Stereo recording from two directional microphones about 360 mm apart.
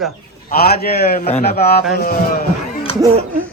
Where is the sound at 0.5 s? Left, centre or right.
Left.